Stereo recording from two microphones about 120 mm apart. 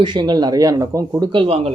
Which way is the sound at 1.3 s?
50° right (ahead or behind).